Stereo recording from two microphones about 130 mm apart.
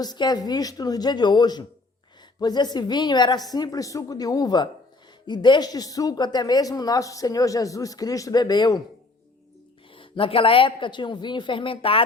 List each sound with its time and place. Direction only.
0.0 s a woman's voice: 30° left (ahead or behind)
9.9 s a woman's voice: 40° left (ahead or behind)